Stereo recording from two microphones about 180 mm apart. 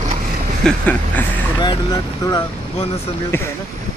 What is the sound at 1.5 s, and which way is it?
Speech, 20° left (ahead or behind).